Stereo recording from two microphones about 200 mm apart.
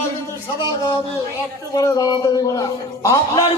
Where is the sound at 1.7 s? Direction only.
15° left (ahead or behind).